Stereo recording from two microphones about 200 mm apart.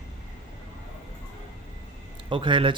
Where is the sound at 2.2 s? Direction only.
25° right (ahead or behind).